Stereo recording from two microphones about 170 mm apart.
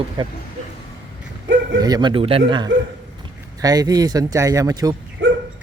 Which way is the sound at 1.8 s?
25° right (ahead or behind).